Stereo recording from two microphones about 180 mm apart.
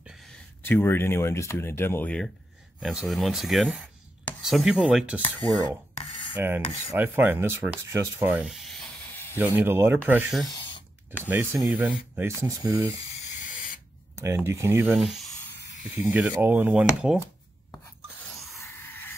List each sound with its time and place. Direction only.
0.7 s speech: 10° left (ahead or behind); by 5.2 s 5° right (ahead or behind)
6.3 s rub: 10° right (ahead or behind)
9.4 s rub: 10° right (ahead or behind)
14.2 s rub: 15° right (ahead or behind)
16.0 s rub: 10° right (ahead or behind)
18.6 s a sound: 10° left (ahead or behind)